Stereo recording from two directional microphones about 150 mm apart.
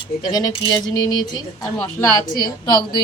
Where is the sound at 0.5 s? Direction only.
30° left (ahead or behind).